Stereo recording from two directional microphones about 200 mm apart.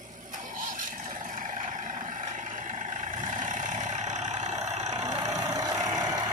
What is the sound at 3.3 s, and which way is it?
Vehicle, 40° right (ahead or behind).